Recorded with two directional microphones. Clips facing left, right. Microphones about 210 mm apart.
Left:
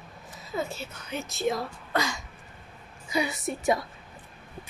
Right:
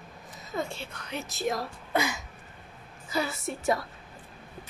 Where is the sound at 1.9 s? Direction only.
10° right (ahead or behind).